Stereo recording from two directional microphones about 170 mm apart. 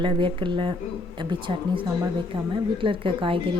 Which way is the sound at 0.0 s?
30° right (ahead or behind).